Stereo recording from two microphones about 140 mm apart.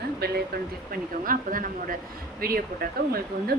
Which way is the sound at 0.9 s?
85° right.